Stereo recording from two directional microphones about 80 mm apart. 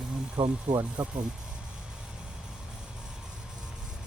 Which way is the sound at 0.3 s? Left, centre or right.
Right.